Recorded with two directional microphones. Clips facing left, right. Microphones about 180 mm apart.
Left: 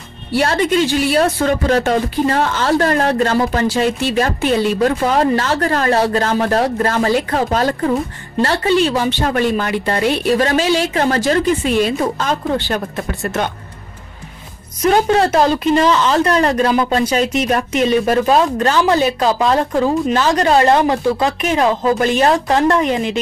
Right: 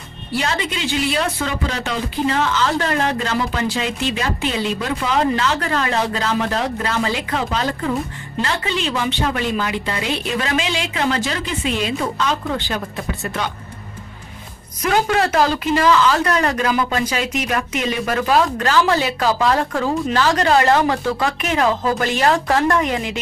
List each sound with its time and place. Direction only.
0.4 s a woman's voice: 50° left (ahead or behind)
14.9 s speech: 30° left (ahead or behind)
15.3 s speech: 20° left (ahead or behind)